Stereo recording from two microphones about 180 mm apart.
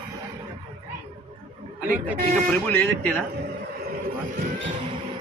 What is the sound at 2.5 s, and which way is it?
Speech, 10° left (ahead or behind).